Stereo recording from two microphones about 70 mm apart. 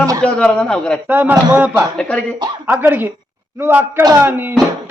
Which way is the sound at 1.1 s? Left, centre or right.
Right.